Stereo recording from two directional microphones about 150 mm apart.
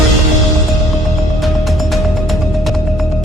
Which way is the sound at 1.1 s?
Centre (ahead or behind).